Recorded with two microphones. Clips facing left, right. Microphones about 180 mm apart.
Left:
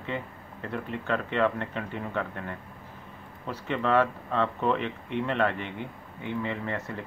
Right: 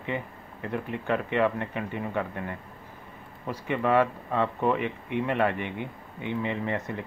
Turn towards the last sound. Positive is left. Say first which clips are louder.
# right 3 dB
turn(degrees=-15)  # may be behind; listen again after turning